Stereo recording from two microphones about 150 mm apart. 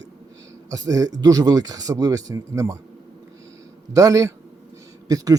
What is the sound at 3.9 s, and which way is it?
Speech, 20° right (ahead or behind).